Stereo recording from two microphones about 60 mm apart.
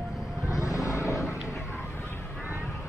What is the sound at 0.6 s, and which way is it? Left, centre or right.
Vehicle, left.